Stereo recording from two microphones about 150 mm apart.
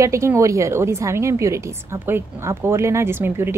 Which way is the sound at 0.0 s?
20° right (ahead or behind).